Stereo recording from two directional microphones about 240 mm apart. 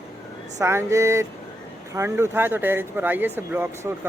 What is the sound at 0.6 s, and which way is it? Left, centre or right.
Speech, centre.